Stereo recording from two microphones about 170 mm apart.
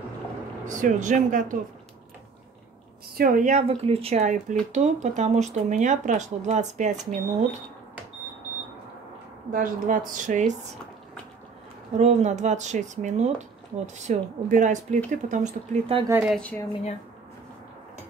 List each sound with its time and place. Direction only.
0.7 s speech: 50° right (ahead or behind)
3.2 s speech: 50° right (ahead or behind)
9.5 s speech: 55° right (ahead or behind)
12.0 s speech: 40° right (ahead or behind)
16.3 s speech: 10° left (ahead or behind)